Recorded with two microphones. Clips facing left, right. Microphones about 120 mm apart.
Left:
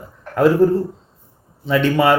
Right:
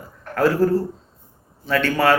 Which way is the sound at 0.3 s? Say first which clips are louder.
Left 4 dB; 20° left (ahead or behind).